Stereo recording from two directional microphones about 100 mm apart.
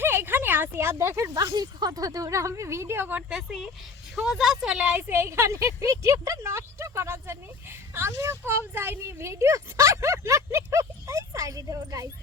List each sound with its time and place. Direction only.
0.0 s speech: 20° right (ahead or behind)
3.2 s speech: 5° right (ahead or behind); by 12.1 s 35° right (ahead or behind)